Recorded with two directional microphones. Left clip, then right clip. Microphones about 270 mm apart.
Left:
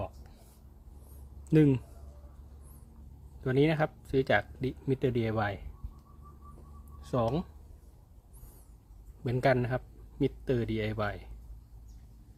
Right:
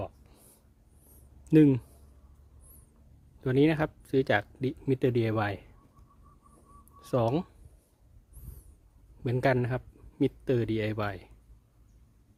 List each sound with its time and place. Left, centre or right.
1.5 s speech: right
3.4 s speech: right
7.0 s speech: right
9.2 s speech: right